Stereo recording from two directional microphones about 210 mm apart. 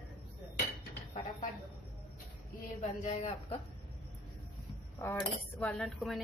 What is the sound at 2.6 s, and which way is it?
Speech, 35° left (ahead or behind).